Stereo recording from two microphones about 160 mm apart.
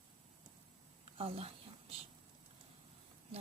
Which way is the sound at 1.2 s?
35° right (ahead or behind).